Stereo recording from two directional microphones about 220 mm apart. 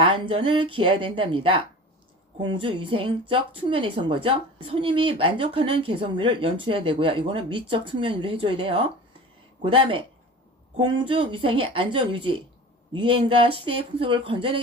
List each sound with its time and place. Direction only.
0.0 s speech: 25° right (ahead or behind)